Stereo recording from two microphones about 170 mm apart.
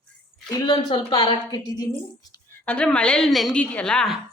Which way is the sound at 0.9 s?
25° left (ahead or behind).